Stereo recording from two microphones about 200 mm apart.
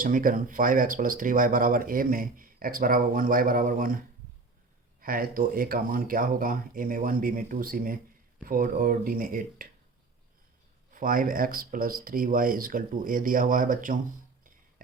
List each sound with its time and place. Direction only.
0.0 s speech: 45° right (ahead or behind)
10.9 s speech: 45° right (ahead or behind)